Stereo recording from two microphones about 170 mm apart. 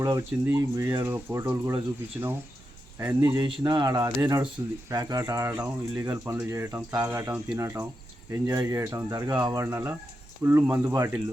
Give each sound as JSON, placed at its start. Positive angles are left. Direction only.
{"t": 0.0, "sound": "speech", "side_deg": -20}
{"t": 1.5, "sound": "speech", "side_deg": -25}
{"t": 2.2, "sound": "speech", "side_deg": -15}